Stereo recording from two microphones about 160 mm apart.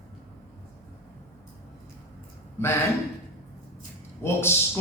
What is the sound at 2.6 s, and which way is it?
Speech, 15° left (ahead or behind).